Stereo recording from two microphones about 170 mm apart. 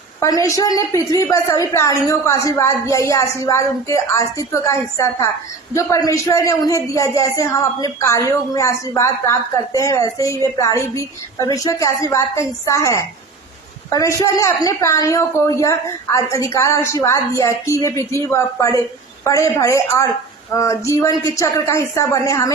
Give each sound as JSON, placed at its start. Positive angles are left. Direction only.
{"t": 0.2, "sound": "a woman's voice", "side_deg": 20}